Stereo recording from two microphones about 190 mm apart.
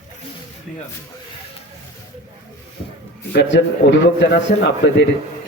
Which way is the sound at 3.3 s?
70° left (ahead or behind).